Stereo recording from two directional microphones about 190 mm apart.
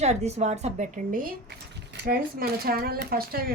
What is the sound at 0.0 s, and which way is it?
A woman's voice, 35° right (ahead or behind).